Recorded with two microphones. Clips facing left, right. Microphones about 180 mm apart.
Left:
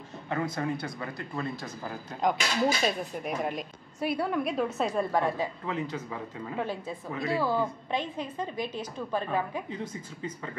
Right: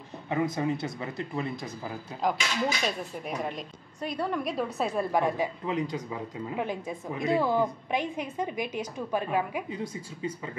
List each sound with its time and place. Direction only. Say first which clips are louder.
0.3 s speech: right 3 dB; 15° right (ahead or behind)
2.4 s speech: left 3 dB; 35° left (ahead or behind)
3.2 s a woman's voice: left 2 dB; 5° left (ahead or behind)
5.1 s speech: right 1 dB; 15° right (ahead or behind)